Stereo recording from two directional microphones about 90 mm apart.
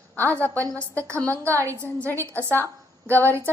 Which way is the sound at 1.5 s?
35° right (ahead or behind).